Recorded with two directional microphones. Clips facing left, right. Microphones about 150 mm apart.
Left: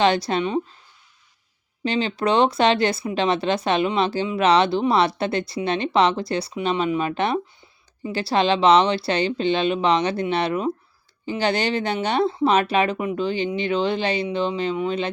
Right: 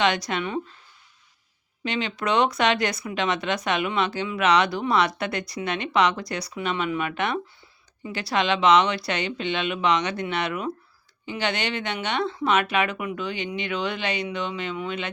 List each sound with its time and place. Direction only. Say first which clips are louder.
0.0 s speech: left 5 dB; 30° left (ahead or behind)
1.8 s speech: left 5 dB; 30° left (ahead or behind)